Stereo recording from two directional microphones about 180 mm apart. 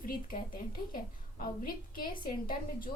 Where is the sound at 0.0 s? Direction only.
50° left (ahead or behind).